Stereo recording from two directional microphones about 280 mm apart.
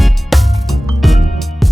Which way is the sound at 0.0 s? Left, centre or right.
Centre.